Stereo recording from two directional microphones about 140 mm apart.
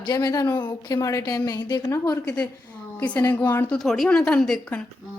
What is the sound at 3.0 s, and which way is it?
Speech, 10° left (ahead or behind).